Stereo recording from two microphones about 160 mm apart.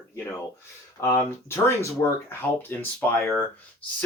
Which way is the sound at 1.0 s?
20° left (ahead or behind).